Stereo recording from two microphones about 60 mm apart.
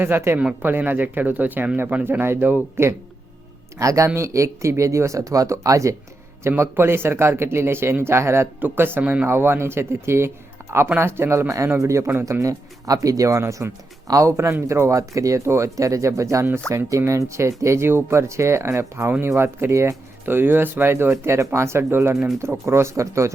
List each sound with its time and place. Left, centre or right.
0.0 s speech: right
3.8 s speech: right
6.6 s speech: right
8.6 s speech: right
12.2 s speech: right
13.4 s speech: right
20.2 s speech: right